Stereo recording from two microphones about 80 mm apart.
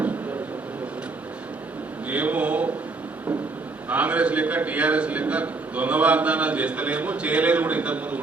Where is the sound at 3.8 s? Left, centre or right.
Centre.